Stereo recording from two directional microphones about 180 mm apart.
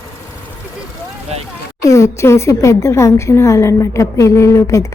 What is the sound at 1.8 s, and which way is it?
A woman's voice, 15° left (ahead or behind).